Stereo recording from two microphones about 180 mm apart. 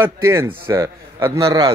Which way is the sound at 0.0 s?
15° right (ahead or behind).